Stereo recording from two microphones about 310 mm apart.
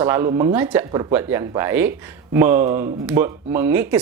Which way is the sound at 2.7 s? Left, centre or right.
Right.